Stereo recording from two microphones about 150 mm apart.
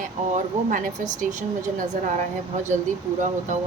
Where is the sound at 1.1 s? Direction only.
60° right (ahead or behind).